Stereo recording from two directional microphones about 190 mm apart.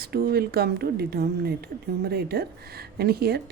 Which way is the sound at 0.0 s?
55° right (ahead or behind).